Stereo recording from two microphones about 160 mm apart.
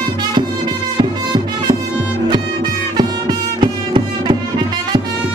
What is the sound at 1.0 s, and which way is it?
Music, 30° right (ahead or behind).